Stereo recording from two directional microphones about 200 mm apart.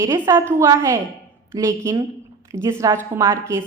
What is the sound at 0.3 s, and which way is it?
A woman's voice, 15° right (ahead or behind).